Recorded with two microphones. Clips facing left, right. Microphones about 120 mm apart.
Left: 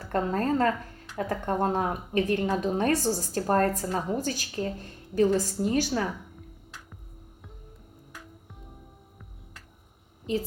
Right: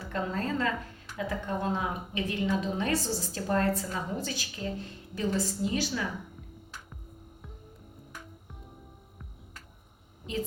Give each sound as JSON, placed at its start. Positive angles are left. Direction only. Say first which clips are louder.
{"t": 0.1, "sound": "a woman's voice", "louder": "left 6 dB", "side_deg": 45}